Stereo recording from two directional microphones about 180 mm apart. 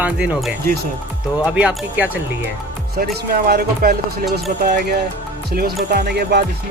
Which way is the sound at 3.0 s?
60° right (ahead or behind).